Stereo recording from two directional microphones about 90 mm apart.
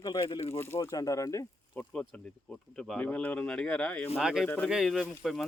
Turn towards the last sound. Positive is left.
turn(degrees=0)  # may be behind; listen again after turning